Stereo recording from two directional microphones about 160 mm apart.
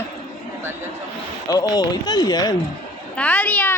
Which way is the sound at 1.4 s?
25° left (ahead or behind).